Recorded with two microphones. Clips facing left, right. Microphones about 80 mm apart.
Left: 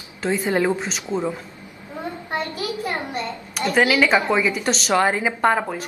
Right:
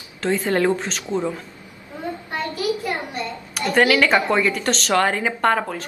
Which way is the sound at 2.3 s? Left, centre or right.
Left.